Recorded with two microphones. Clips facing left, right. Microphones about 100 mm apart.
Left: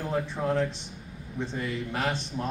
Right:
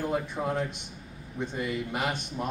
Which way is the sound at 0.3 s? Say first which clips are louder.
Left 3 dB; 15° right (ahead or behind).